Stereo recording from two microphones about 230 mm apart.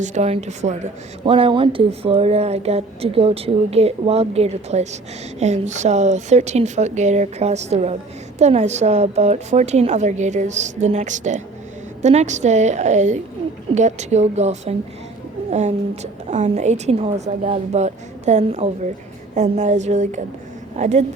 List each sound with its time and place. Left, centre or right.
0.0 s a woman's voice: right